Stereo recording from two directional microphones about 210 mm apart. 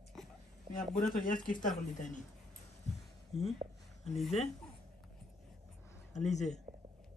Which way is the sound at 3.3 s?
Centre (ahead or behind).